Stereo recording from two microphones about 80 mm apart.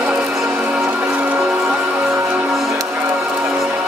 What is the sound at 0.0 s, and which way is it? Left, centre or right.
Music, centre.